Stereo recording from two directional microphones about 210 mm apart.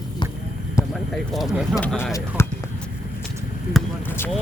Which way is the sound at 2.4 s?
10° left (ahead or behind).